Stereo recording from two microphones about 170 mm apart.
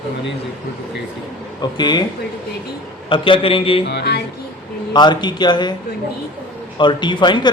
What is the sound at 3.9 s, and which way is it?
Music, 70° left (ahead or behind).